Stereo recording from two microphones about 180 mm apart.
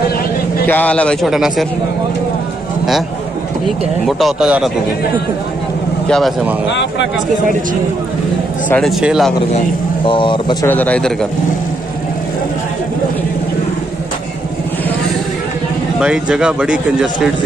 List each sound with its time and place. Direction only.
0.7 s speech: 10° left (ahead or behind)
4.2 s speech: 5° right (ahead or behind)
6.0 s speech: 5° left (ahead or behind)
6.7 s speech: 80° left
8.6 s speech: 5° left (ahead or behind)
10.0 s speech: 25° left (ahead or behind)
10.7 s speech: 10° left (ahead or behind)
16.0 s speech: 5° right (ahead or behind)